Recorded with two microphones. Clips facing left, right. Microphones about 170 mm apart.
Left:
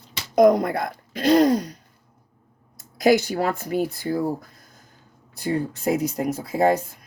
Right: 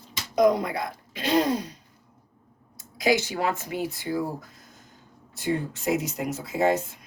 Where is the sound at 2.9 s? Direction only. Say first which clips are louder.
Left 5 dB; 45° left (ahead or behind).